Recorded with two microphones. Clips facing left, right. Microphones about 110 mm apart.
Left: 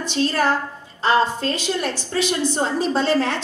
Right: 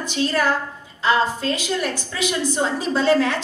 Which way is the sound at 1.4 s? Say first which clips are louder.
Even; 30° left (ahead or behind).